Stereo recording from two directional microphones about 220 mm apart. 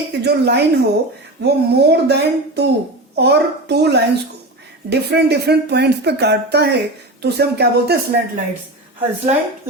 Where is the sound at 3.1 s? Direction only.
50° right (ahead or behind).